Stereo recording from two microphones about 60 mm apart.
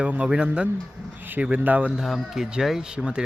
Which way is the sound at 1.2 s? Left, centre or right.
Right.